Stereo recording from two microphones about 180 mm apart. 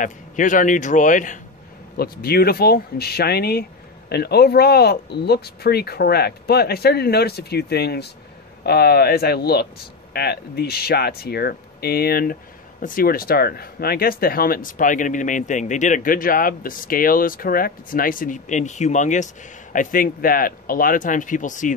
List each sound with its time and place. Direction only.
0.0 s speech: 45° left (ahead or behind)
2.0 s speech: 60° left (ahead or behind)